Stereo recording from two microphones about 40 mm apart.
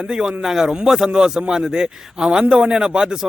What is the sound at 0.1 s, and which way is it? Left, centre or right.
A man's voice, right.